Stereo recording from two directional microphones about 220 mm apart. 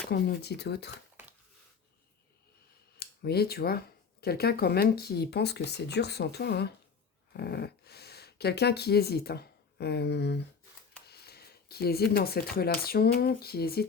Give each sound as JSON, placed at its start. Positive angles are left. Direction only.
{"t": 0.1, "sound": "speech", "side_deg": 50}
{"t": 3.0, "sound": "speech", "side_deg": 45}